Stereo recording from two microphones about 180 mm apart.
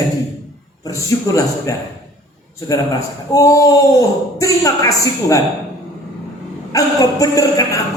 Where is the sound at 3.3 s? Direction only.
20° left (ahead or behind).